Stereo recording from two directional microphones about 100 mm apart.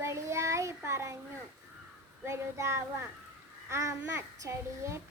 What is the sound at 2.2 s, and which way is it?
A child's voice, 30° right (ahead or behind).